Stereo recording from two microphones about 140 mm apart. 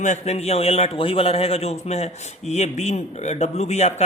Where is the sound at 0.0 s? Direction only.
55° left (ahead or behind).